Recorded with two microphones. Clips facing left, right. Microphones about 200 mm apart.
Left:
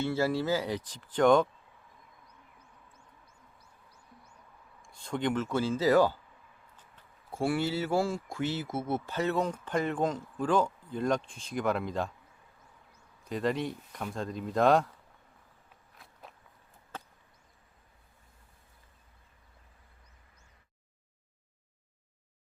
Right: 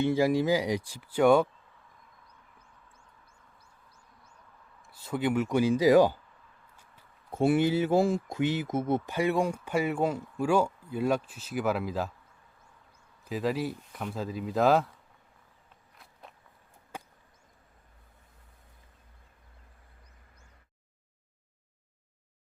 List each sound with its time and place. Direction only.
0.0 s speech: 15° right (ahead or behind)
4.8 s speech: 5° right (ahead or behind)
6.7 s a sound: 10° right (ahead or behind)
7.3 s speech: 20° right (ahead or behind); by 12.1 s 5° right (ahead or behind)
13.2 s speech: 5° right (ahead or behind)
16.0 s walk: centre (ahead or behind)
16.9 s chop: 10° right (ahead or behind)